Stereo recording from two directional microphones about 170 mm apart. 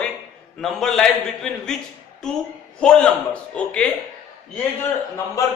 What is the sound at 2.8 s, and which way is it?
A man's voice, 5° left (ahead or behind).